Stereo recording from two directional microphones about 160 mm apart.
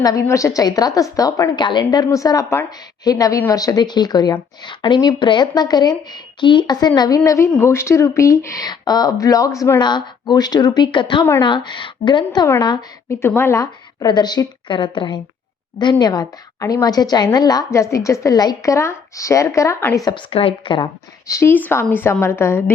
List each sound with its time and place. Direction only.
0.0 s a woman's voice: 20° left (ahead or behind)
20.1 s speech: 35° left (ahead or behind)
21.2 s a woman's voice: 15° left (ahead or behind)